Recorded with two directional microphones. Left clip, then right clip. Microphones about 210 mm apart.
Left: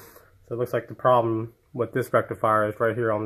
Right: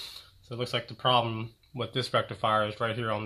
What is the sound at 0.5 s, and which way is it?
Speech, 30° left (ahead or behind).